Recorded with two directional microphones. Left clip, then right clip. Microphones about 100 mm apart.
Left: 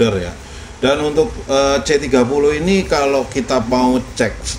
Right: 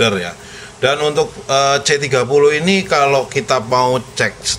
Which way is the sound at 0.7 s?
35° right (ahead or behind).